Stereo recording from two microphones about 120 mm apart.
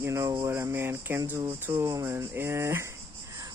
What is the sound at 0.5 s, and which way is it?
Speech, 20° right (ahead or behind).